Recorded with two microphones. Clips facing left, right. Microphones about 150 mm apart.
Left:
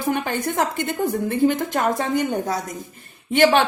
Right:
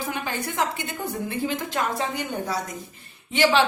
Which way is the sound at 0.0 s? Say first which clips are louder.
Left 6 dB; 55° left (ahead or behind).